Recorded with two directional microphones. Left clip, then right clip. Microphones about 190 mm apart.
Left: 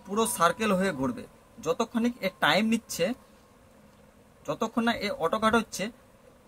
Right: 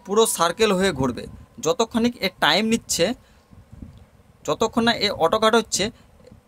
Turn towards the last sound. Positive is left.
turn(degrees=-55)  # may be behind; listen again after turning